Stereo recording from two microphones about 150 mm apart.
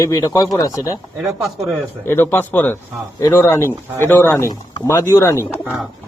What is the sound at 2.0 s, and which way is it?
Speech, 15° left (ahead or behind).